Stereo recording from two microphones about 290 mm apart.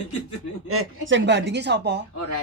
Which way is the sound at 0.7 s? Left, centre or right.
Right.